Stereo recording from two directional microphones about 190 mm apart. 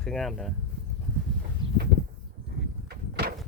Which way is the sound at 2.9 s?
55° right (ahead or behind).